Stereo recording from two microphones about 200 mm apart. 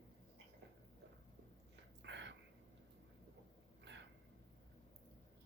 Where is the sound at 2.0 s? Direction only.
60° right (ahead or behind).